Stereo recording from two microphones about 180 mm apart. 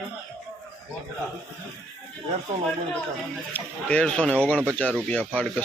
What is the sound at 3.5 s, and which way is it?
Speech, 5° left (ahead or behind).